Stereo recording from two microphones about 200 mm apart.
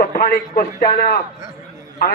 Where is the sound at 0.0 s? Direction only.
45° left (ahead or behind).